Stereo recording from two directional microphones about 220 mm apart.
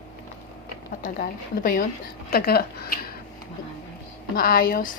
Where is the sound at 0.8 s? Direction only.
40° left (ahead or behind).